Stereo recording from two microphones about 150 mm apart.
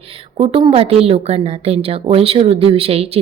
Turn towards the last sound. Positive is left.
turn(degrees=-40)  # may be behind; listen again after turning